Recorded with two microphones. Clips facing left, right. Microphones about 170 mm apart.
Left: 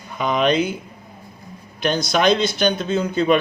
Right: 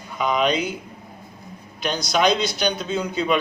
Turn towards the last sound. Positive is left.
turn(degrees=50)  # may be behind; listen again after turning